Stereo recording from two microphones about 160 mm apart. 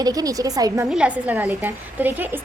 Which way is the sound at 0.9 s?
5° right (ahead or behind).